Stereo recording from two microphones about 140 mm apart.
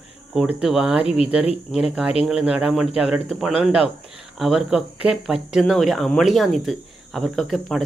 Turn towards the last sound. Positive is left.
turn(degrees=0)  # may be behind; listen again after turning